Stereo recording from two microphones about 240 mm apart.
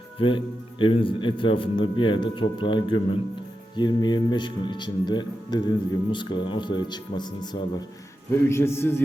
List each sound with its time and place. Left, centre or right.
0.2 s a man's voice: left